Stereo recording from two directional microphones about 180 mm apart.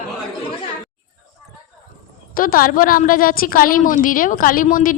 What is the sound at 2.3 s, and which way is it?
A woman's voice, 50° left (ahead or behind).